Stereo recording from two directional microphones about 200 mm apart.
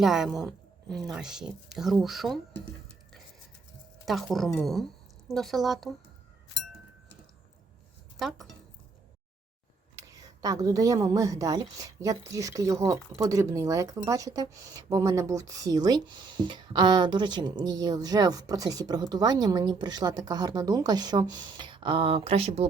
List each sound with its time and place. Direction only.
0.0 s speech: centre (ahead or behind)
4.0 s speech: centre (ahead or behind)
8.2 s speech: centre (ahead or behind)
9.9 s a woman's voice: 20° right (ahead or behind)